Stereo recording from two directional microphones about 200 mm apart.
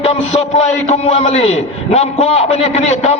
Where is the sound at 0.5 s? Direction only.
30° left (ahead or behind).